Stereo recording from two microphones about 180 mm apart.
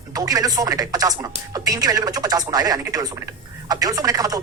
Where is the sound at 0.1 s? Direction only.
20° right (ahead or behind).